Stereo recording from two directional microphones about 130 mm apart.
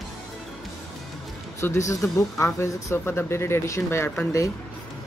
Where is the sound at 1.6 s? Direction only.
25° left (ahead or behind).